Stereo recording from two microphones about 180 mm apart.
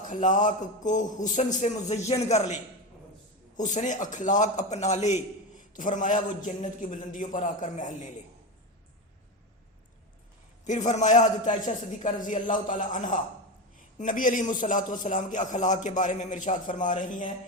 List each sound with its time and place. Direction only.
0.1 s a man's voice: 45° left (ahead or behind)
3.6 s a man's voice: 45° left (ahead or behind)
10.7 s a man's voice: 40° left (ahead or behind)